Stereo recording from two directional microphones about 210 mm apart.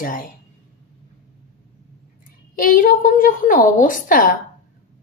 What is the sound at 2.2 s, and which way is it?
A woman's voice, 40° left (ahead or behind).